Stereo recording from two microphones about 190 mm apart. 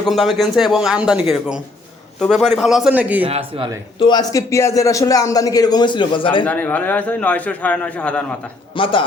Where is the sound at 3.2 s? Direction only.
30° right (ahead or behind).